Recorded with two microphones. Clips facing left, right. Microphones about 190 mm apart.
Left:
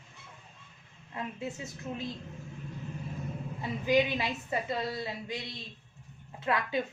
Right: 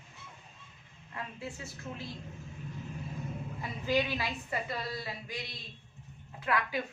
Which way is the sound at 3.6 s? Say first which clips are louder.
Left 4 dB; 15° left (ahead or behind).